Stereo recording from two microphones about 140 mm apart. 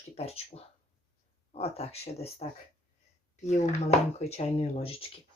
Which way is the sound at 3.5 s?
55° left (ahead or behind).